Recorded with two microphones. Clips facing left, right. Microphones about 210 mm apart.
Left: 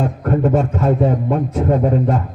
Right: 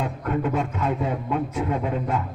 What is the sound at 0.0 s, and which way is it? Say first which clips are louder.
A man's voice: left 8 dB; 45° left (ahead or behind).